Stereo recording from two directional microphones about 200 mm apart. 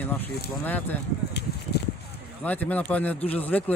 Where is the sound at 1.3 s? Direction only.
55° left (ahead or behind).